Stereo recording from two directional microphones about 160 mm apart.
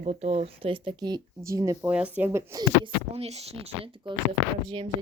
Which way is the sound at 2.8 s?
40° right (ahead or behind).